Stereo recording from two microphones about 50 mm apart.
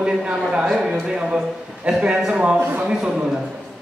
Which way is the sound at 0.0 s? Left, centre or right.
Centre.